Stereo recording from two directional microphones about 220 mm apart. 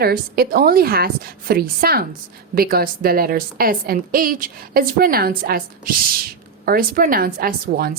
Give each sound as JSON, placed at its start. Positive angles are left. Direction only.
{"t": 0.0, "sound": "a woman's voice", "side_deg": -45}